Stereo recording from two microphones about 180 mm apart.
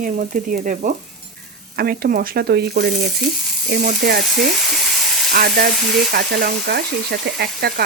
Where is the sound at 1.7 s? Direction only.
60° right (ahead or behind).